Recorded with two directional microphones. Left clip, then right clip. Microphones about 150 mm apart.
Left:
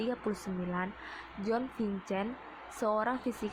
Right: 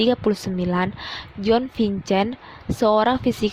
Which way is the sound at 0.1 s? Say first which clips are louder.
Right 15 dB; 60° right (ahead or behind).